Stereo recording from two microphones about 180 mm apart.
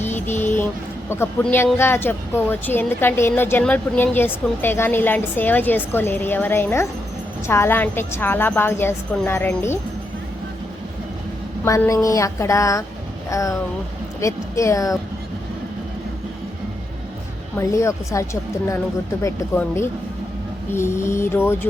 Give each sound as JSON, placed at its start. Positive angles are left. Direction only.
{"t": 1.1, "sound": "a woman's voice", "side_deg": 10}
{"t": 11.6, "sound": "a woman's voice", "side_deg": 15}
{"t": 17.6, "sound": "a woman's voice", "side_deg": 15}